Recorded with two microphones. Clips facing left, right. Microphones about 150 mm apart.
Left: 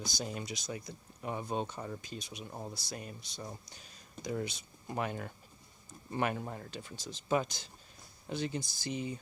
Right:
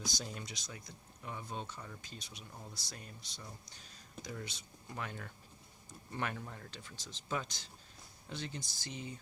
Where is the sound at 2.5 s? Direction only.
45° left (ahead or behind).